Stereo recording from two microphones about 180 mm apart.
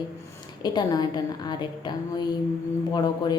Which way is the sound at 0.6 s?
25° left (ahead or behind).